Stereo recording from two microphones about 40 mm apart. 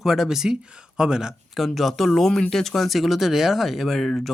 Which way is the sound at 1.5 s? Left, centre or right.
Centre.